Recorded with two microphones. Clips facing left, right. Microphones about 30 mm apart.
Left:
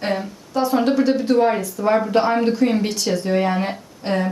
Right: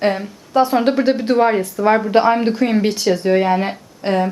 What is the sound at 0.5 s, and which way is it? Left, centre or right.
A woman's voice, right.